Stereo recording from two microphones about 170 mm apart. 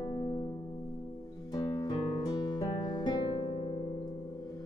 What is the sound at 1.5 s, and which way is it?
Music, 25° left (ahead or behind).